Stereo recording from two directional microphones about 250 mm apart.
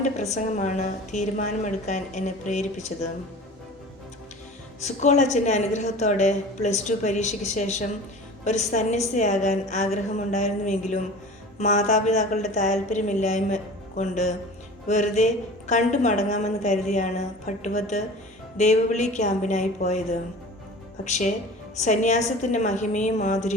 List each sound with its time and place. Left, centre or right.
0.0 s a woman's voice: left
4.8 s a woman's voice: left